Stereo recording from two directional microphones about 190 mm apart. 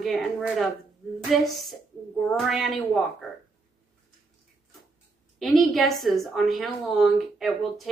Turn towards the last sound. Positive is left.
turn(degrees=0)  # may be behind; listen again after turning